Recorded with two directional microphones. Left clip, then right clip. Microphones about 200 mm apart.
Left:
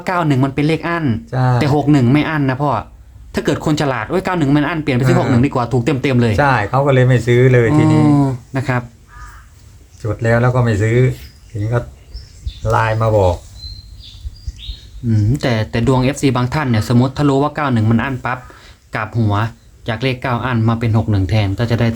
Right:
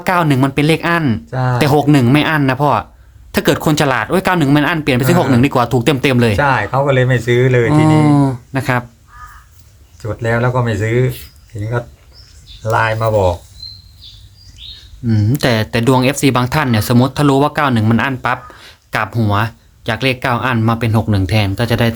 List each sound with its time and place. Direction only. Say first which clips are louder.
0.0 s speech: right 3 dB; 35° right (ahead or behind)
1.3 s speech: even; 5° left (ahead or behind)
1.5 s speech: right 3 dB; 35° right (ahead or behind)
6.3 s speech: even; 5° left (ahead or behind)
7.7 s speech: right 1 dB; 35° right (ahead or behind)
10.0 s speech: left 1 dB; centre (ahead or behind)
12.6 s speech: right 1 dB; centre (ahead or behind)
15.0 s speech: right 3 dB; 35° right (ahead or behind)